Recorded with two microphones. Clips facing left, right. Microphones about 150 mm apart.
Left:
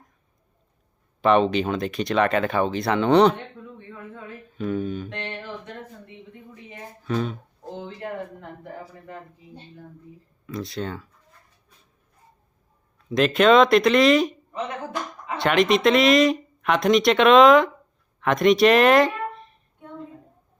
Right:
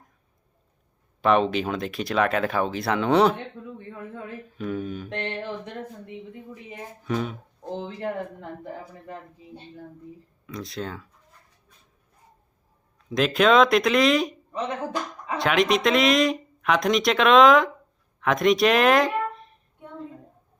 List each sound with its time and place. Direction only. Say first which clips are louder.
1.2 s speech: left 2 dB; centre (ahead or behind)
4.5 s speech: left 4 dB; centre (ahead or behind)
5.0 s speech: right 3 dB; 25° right (ahead or behind)
6.5 s speech: right 2 dB; 10° right (ahead or behind)
8.4 s speech: right 1 dB; 20° right (ahead or behind)
10.4 s speech: left 3 dB; centre (ahead or behind)
13.1 s speech: left 3 dB; centre (ahead or behind)
15.4 s speech: left 2 dB; centre (ahead or behind)